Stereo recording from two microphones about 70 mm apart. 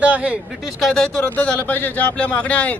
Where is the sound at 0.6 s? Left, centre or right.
Centre.